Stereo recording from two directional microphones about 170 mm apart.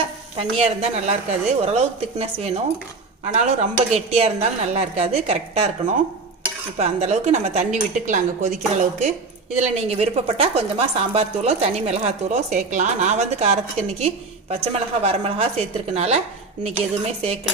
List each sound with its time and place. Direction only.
0.4 s speech: 35° right (ahead or behind)
6.8 s speech: 40° right (ahead or behind)